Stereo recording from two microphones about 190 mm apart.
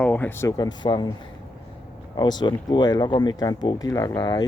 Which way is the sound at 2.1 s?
20° left (ahead or behind).